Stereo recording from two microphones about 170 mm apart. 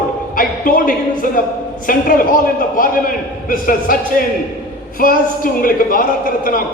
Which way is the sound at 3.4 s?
55° left (ahead or behind).